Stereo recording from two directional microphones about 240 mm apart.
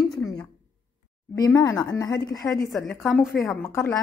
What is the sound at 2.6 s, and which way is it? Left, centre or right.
A woman's voice, centre.